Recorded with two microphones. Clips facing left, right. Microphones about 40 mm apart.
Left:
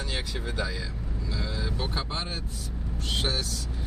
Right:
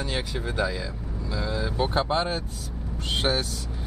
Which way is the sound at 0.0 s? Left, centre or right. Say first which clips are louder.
Right 4 dB; centre.